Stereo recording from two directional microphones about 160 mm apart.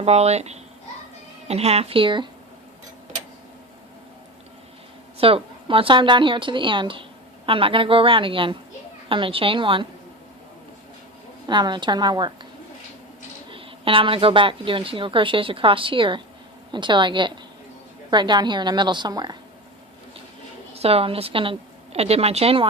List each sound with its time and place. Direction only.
0.0 s a child's voice: 40° right (ahead or behind)
5.1 s a woman's voice: 35° right (ahead or behind)
11.4 s a woman's voice: 30° right (ahead or behind)
13.5 s a woman's voice: 35° right (ahead or behind)
20.7 s a woman's voice: 40° right (ahead or behind)